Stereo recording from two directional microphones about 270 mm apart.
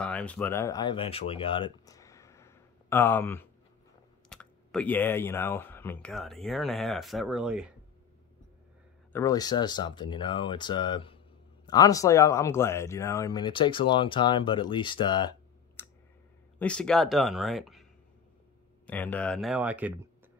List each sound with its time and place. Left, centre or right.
0.0 s speech: centre
9.1 s speech: centre
18.9 s speech: centre